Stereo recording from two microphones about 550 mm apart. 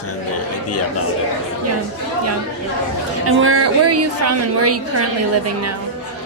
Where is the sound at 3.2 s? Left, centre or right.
Right.